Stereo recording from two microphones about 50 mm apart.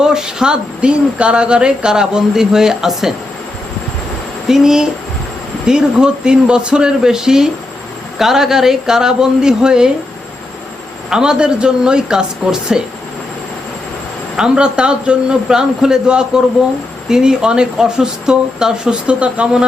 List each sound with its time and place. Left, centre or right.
0.0 s speech: centre
4.4 s speech: centre
11.1 s speech: centre
14.3 s speech: centre